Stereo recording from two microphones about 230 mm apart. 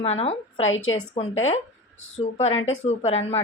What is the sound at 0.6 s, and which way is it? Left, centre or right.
Speech, left.